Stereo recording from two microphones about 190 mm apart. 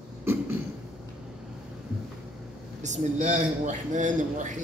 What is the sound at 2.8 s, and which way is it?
A man's voice, 40° right (ahead or behind).